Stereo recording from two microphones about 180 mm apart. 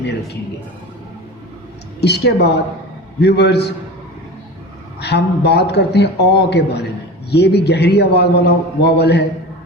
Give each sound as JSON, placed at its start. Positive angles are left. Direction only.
{"t": 2.0, "sound": "a man's voice", "side_deg": 65}
{"t": 4.9, "sound": "a man's voice", "side_deg": 65}